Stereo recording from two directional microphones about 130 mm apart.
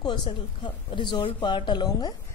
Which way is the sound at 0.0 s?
35° left (ahead or behind).